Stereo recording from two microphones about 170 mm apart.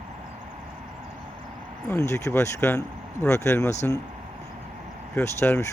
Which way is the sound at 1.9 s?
15° left (ahead or behind).